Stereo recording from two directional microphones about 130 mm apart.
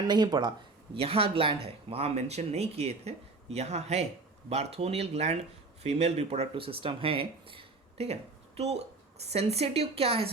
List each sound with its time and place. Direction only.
0.1 s speech: 35° right (ahead or behind)
0.9 s speech: 45° right (ahead or behind)